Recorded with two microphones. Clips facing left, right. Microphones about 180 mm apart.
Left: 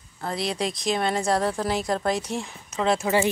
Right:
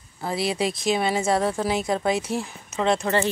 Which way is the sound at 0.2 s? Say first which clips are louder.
Right 3 dB; 5° right (ahead or behind).